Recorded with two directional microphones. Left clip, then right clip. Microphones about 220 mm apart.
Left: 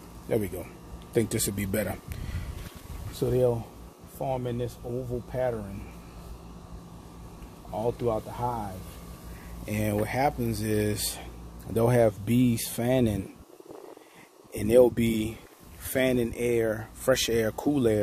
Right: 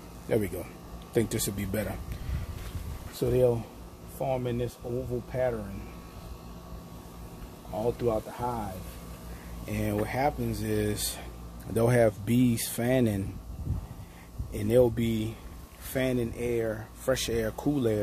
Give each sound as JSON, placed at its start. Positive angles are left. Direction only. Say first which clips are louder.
{"t": 0.3, "sound": "speech", "louder": "even", "side_deg": 10}
{"t": 1.1, "sound": "speech", "louder": "left 1 dB", "side_deg": 20}
{"t": 1.6, "sound": "speech", "louder": "left 3 dB", "side_deg": 40}
{"t": 3.2, "sound": "speech", "louder": "even", "side_deg": 20}
{"t": 7.8, "sound": "speech", "louder": "even", "side_deg": 25}
{"t": 8.4, "sound": "speech", "louder": "left 2 dB", "side_deg": 10}
{"t": 9.7, "sound": "speech", "louder": "left 2 dB", "side_deg": 45}
{"t": 11.7, "sound": "speech", "louder": "left 1 dB", "side_deg": 10}
{"t": 14.5, "sound": "speech", "louder": "left 4 dB", "side_deg": 30}